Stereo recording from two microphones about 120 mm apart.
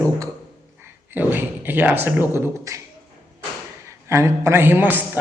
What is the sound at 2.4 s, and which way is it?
Speech, 25° right (ahead or behind).